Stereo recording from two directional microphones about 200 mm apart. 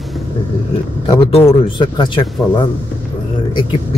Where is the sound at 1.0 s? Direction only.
25° left (ahead or behind).